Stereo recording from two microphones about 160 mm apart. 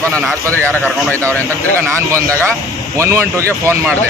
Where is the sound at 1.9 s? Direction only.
20° right (ahead or behind).